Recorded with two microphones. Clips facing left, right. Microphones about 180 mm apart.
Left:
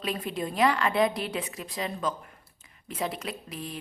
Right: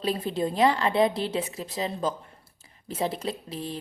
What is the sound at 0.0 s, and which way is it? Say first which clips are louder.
A woman's voice: right 4 dB; 30° right (ahead or behind).